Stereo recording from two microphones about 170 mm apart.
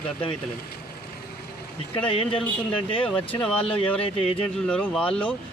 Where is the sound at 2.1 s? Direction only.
30° left (ahead or behind).